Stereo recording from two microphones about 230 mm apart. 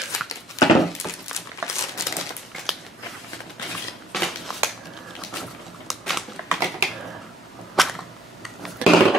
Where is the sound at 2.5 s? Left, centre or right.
Centre.